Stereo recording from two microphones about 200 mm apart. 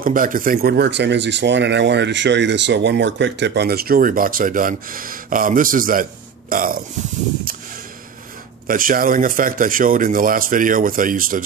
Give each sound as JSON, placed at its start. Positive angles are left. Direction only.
{"t": 0.0, "sound": "speech", "side_deg": -45}
{"t": 8.6, "sound": "speech", "side_deg": -45}